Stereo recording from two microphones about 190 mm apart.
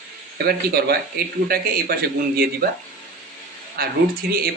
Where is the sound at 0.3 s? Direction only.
55° right (ahead or behind).